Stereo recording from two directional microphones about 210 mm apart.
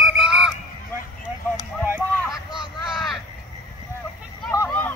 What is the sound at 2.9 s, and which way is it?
Crow, centre (ahead or behind).